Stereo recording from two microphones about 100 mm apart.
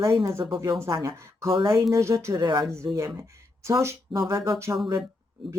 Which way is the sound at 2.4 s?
45° right (ahead or behind).